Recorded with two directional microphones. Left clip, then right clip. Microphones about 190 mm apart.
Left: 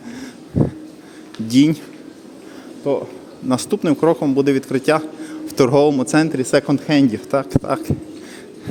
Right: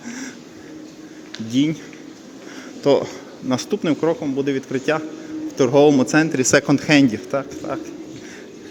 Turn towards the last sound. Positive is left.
turn(degrees=25)  # may be behind; listen again after turning